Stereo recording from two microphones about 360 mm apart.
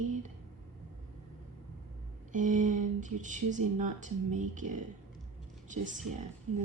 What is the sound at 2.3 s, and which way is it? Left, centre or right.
A woman's voice, right.